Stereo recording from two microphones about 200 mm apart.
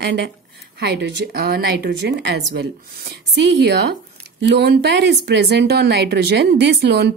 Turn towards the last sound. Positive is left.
turn(degrees=-55)  # may be behind; listen again after turning